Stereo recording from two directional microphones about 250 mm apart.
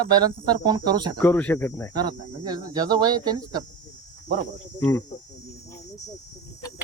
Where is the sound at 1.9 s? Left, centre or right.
Centre.